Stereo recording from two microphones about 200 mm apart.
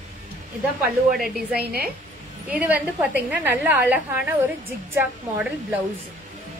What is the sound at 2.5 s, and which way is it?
A woman's voice, 5° right (ahead or behind).